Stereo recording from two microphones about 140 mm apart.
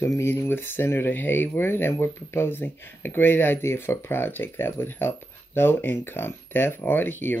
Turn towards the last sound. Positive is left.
turn(degrees=15)  # may be behind; listen again after turning